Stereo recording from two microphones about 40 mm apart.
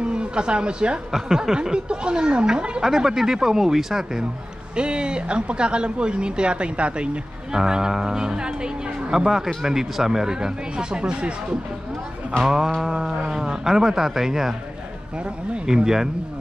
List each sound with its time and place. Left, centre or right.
0.0 s speech: right
1.1 s speech: centre
1.5 s speech: right
2.8 s speech: centre
4.7 s speech: right
7.5 s speech: centre
12.4 s speech: centre
15.6 s speech: centre